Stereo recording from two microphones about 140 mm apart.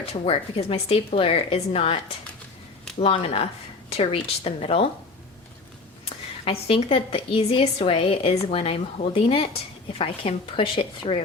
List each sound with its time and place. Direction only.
0.1 s a woman's voice: 45° left (ahead or behind)
3.0 s a woman's voice: 45° left (ahead or behind)
6.4 s a woman's voice: 40° left (ahead or behind)